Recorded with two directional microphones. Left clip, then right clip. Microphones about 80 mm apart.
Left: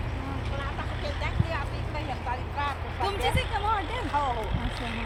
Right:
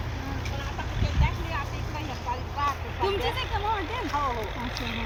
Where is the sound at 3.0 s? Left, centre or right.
Left.